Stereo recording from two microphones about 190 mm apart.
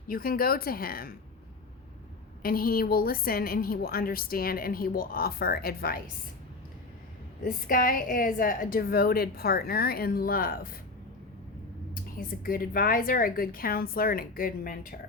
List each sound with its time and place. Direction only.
0.1 s a woman's voice: 50° left (ahead or behind)
2.4 s a woman's voice: 50° left (ahead or behind)
7.4 s a woman's voice: 45° left (ahead or behind)
12.1 s a woman's voice: 50° left (ahead or behind)